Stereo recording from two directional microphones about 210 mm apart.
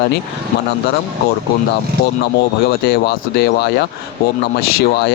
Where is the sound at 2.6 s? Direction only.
50° left (ahead or behind).